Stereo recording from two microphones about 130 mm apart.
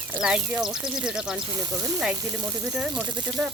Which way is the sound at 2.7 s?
5° right (ahead or behind).